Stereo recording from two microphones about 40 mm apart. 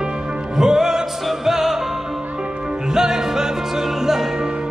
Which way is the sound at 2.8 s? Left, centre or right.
Centre.